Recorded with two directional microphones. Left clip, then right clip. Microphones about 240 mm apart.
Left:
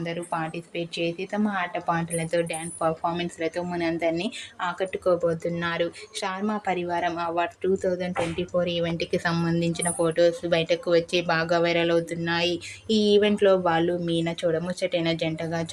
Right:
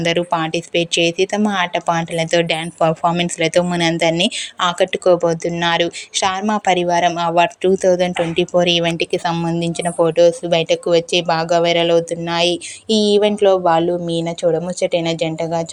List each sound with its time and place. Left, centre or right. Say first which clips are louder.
0.0 s speech: right 12 dB; right